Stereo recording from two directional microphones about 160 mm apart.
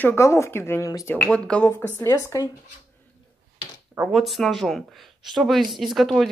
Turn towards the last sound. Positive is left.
turn(degrees=0)  # may be behind; listen again after turning